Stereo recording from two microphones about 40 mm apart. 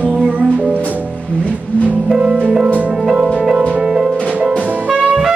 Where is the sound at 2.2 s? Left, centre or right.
Right.